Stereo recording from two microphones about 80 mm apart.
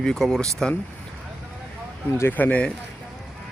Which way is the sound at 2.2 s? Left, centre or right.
Left.